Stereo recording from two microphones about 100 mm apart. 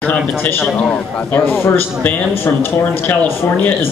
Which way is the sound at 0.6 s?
Centre (ahead or behind).